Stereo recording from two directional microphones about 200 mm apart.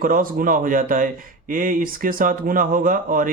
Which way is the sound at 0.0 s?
45° right (ahead or behind).